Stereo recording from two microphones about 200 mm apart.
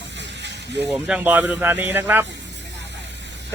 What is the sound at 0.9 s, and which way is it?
Speech, 5° right (ahead or behind).